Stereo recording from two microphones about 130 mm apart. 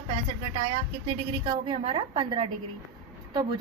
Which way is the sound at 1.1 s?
35° right (ahead or behind).